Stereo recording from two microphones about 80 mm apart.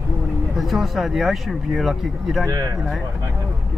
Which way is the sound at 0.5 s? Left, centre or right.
Centre.